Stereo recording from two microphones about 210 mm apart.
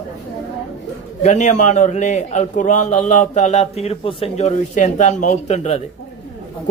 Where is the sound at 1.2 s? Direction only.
35° left (ahead or behind).